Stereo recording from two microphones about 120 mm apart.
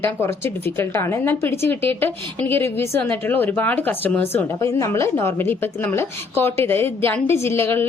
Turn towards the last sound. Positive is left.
turn(degrees=20)  # may be behind; listen again after turning